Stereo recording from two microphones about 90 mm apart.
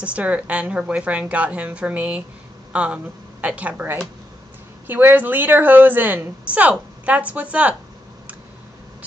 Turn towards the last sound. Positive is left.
turn(degrees=-15)  # may be behind; listen again after turning